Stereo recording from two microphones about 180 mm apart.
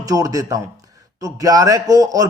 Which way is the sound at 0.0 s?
20° right (ahead or behind).